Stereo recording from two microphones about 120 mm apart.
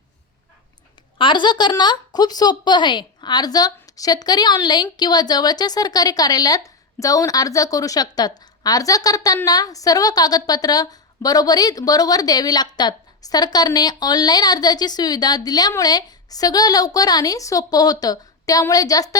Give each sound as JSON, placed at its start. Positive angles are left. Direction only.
{"t": 1.2, "sound": "a woman's voice", "side_deg": 40}